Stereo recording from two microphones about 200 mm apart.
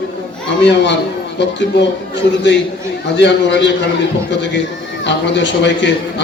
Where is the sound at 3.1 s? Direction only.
60° left (ahead or behind).